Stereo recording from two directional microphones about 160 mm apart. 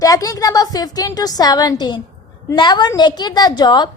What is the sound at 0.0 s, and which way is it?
A woman's voice, 20° left (ahead or behind).